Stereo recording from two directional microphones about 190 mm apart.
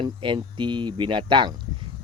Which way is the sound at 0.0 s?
25° right (ahead or behind).